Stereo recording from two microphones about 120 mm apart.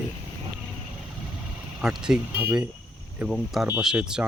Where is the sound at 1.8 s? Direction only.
5° right (ahead or behind).